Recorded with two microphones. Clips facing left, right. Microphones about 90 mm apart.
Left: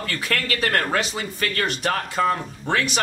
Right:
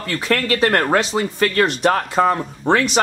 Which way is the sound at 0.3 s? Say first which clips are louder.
Right 7 dB; 30° right (ahead or behind).